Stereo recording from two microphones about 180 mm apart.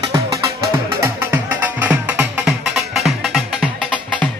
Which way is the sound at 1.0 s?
10° right (ahead or behind).